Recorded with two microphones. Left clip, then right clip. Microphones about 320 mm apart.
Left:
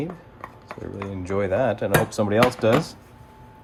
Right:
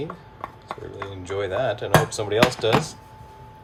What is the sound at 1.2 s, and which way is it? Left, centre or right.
Speech, centre.